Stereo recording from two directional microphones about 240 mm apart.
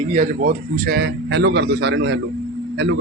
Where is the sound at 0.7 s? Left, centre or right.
Right.